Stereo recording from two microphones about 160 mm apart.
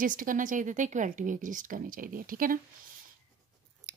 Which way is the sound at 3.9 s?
65° right (ahead or behind).